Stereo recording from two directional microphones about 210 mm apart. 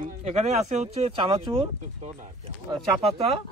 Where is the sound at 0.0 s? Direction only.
30° right (ahead or behind).